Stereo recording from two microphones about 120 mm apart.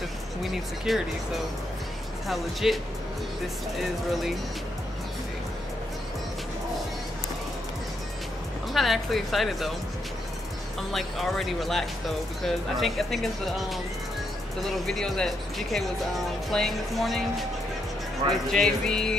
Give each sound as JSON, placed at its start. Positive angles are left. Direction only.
{"t": 0.4, "sound": "speech", "side_deg": 0}
{"t": 2.2, "sound": "speech", "side_deg": 0}
{"t": 8.7, "sound": "speech", "side_deg": 0}
{"t": 10.8, "sound": "speech", "side_deg": 0}
{"t": 18.3, "sound": "speech", "side_deg": 5}